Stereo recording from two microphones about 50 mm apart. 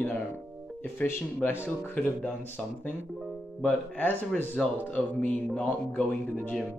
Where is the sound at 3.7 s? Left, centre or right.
Left.